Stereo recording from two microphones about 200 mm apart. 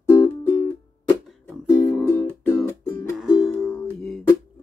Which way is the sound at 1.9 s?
10° left (ahead or behind).